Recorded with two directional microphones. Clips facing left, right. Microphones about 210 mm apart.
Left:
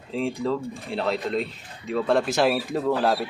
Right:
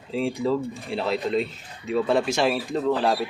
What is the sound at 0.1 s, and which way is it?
Speech, centre (ahead or behind).